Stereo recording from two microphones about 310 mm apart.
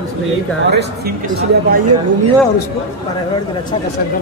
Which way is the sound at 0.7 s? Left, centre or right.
Right.